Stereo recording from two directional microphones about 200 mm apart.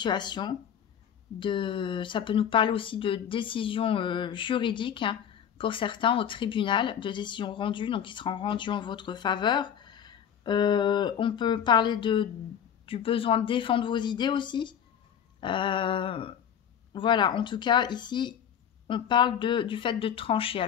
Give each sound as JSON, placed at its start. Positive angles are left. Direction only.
{"t": 0.0, "sound": "speech", "side_deg": 20}